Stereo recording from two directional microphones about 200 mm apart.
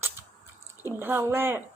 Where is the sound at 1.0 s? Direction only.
10° right (ahead or behind).